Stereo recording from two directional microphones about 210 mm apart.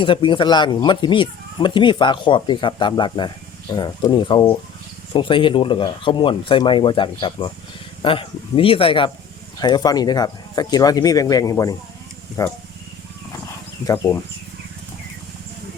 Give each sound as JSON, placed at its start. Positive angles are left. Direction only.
{"t": 0.0, "sound": "speech", "side_deg": 25}
{"t": 13.8, "sound": "speech", "side_deg": 15}